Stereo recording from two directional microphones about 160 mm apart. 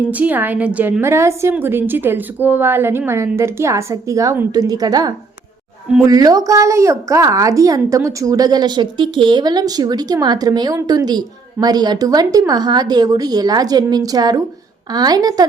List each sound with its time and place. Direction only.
0.1 s a woman's voice: 10° right (ahead or behind)